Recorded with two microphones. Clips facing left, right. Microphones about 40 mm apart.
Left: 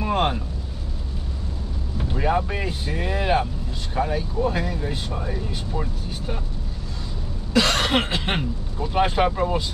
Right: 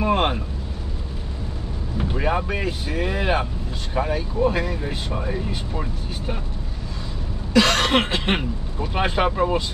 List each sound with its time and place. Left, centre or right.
0.0 s vehicle: right
2.0 s speech: centre
7.5 s cough: centre
8.4 s speech: right
9.0 s speech: centre